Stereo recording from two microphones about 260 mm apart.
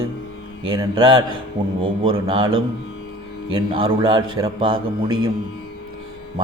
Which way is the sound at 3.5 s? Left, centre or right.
Centre.